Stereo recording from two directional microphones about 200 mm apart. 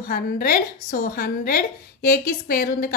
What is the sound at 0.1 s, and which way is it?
A woman's voice, 45° left (ahead or behind).